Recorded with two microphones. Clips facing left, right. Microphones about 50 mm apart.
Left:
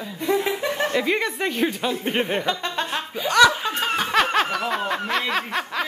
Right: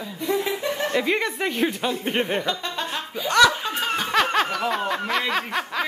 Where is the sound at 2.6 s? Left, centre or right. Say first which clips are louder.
Left 2 dB; left.